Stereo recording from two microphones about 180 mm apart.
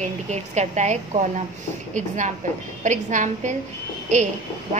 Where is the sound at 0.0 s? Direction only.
40° right (ahead or behind).